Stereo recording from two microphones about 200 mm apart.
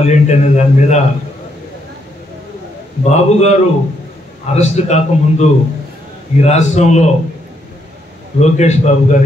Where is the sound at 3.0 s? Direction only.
35° left (ahead or behind).